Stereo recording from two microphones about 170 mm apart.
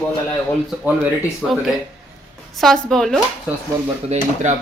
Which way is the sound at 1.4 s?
Centre (ahead or behind).